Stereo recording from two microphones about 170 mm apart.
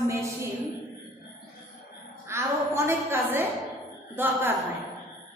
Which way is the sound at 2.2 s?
15° right (ahead or behind).